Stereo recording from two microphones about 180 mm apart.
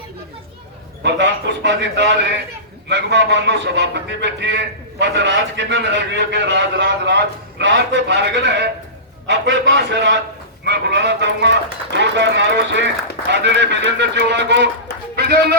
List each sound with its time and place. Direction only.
1.0 s a man's voice: 75° right (ahead or behind)